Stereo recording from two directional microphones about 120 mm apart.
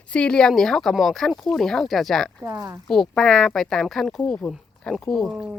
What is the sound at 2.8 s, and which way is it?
Speech, 5° left (ahead or behind).